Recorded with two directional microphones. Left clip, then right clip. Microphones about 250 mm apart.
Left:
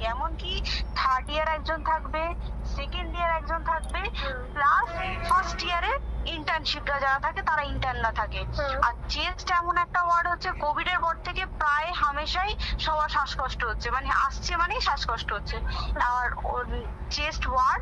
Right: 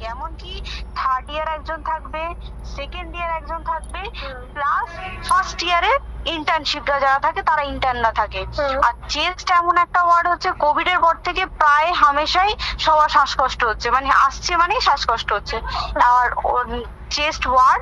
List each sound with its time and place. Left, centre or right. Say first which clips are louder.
0.0 s a sound: even; centre
2.8 s vehicle: right 2 dB; right
5.2 s a woman's voice: right 7 dB; right